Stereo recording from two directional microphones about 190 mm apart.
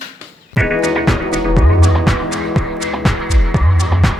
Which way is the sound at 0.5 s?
Centre (ahead or behind).